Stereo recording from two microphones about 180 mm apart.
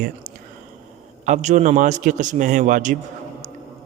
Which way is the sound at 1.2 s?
40° right (ahead or behind).